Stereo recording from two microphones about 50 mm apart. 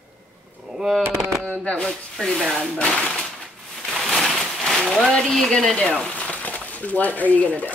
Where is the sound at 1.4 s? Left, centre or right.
Left.